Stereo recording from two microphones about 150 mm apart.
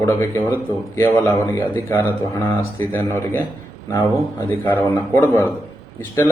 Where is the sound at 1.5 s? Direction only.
15° left (ahead or behind).